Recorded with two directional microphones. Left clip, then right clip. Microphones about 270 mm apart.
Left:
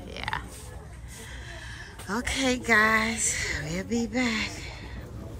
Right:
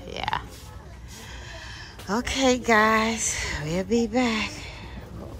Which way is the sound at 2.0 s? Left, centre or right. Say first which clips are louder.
Right 5 dB; centre.